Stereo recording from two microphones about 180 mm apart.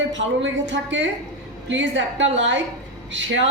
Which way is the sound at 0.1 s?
90° right.